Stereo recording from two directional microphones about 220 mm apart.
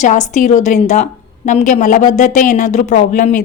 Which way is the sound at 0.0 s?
35° left (ahead or behind).